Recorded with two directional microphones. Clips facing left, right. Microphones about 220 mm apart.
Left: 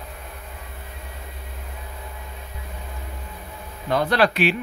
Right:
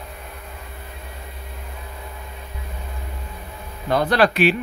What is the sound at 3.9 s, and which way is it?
Speech, 45° right (ahead or behind).